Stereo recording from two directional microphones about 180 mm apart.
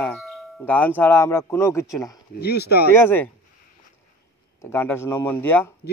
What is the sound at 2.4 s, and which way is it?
Speech, 65° left (ahead or behind).